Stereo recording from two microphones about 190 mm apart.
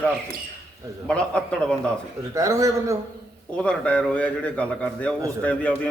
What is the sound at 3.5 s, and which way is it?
A man's voice, 5° left (ahead or behind).